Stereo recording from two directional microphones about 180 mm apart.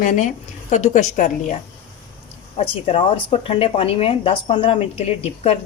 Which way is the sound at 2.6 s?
30° left (ahead or behind).